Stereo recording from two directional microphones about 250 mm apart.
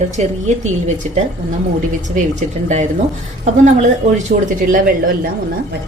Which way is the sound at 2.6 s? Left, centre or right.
Right.